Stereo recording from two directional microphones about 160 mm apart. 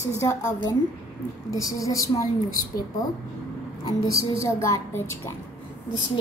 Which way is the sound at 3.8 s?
20° left (ahead or behind).